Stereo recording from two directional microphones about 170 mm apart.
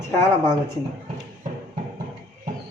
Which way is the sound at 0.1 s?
15° left (ahead or behind).